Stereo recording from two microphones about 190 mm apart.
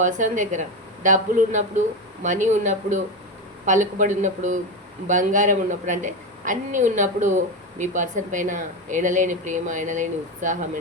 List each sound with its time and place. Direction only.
0.0 s a woman's voice: 40° right (ahead or behind)